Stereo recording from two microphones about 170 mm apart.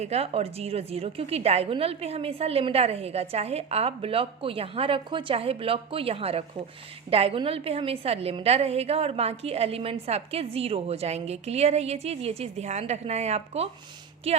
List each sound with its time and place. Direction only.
0.0 s a woman's voice: 40° right (ahead or behind)